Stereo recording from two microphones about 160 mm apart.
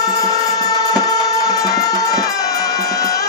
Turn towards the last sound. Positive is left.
turn(degrees=20)  # may be behind; listen again after turning